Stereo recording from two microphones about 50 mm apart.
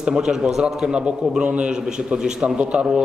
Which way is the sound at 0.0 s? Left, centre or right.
Centre.